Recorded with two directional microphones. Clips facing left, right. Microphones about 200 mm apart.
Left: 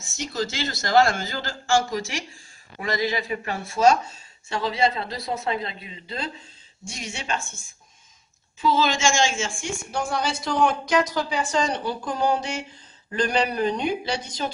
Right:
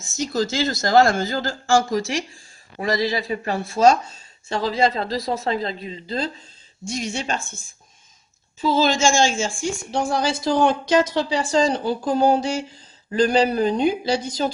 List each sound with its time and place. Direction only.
0.2 s a woman's voice: 40° right (ahead or behind)
8.5 s a woman's voice: 35° right (ahead or behind)